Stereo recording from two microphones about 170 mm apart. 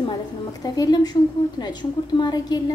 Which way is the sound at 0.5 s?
20° left (ahead or behind).